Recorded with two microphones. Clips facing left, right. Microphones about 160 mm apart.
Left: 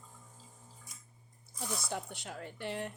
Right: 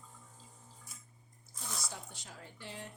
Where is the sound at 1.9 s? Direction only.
65° left (ahead or behind).